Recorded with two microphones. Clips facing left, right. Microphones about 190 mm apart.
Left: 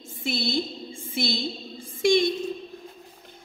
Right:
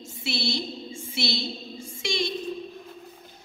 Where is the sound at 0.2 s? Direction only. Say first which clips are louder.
Left 3 dB; 50° left (ahead or behind).